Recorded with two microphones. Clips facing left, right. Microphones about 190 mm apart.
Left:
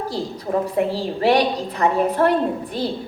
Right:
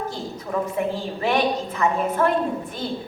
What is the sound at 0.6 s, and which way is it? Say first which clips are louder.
A woman's voice: left 2 dB; 35° left (ahead or behind).